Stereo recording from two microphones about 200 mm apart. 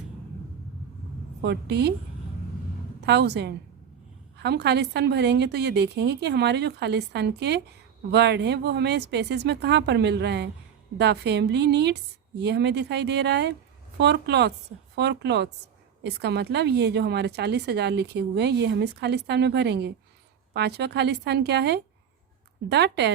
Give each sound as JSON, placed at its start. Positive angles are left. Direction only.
{"t": 1.4, "sound": "a woman's voice", "side_deg": -55}
{"t": 3.0, "sound": "a woman's voice", "side_deg": -55}